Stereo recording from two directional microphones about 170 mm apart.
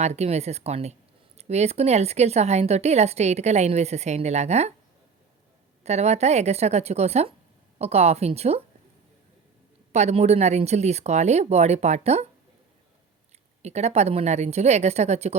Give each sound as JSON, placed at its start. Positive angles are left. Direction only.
{"t": 0.0, "sound": "speech", "side_deg": -40}
{"t": 5.8, "sound": "speech", "side_deg": -40}
{"t": 9.9, "sound": "speech", "side_deg": -40}
{"t": 13.6, "sound": "speech", "side_deg": -40}